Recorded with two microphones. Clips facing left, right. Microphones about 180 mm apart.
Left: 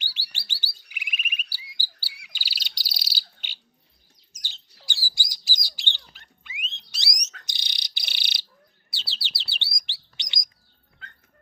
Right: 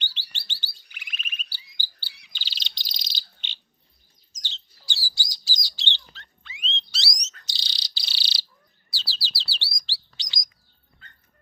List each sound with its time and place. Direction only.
0.0 s chirp: 10° left (ahead or behind)
2.3 s bird: 10° left (ahead or behind)
4.3 s rodents: 10° left (ahead or behind)
4.9 s bird: 15° left (ahead or behind)
6.1 s dog: 15° left (ahead or behind)
7.4 s bird: 20° left (ahead or behind)
8.9 s chirp: 20° left (ahead or behind)